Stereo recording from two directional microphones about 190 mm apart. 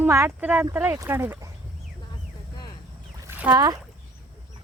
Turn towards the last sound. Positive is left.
turn(degrees=-20)  # may be behind; listen again after turning